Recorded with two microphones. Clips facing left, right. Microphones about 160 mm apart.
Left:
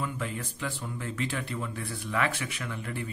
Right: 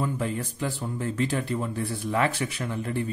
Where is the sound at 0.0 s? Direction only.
35° right (ahead or behind).